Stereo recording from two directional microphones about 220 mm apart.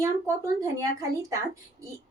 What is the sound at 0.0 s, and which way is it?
A woman's voice, 15° right (ahead or behind).